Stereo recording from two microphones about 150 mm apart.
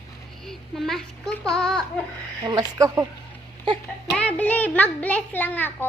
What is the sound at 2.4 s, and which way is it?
Speech, 25° right (ahead or behind).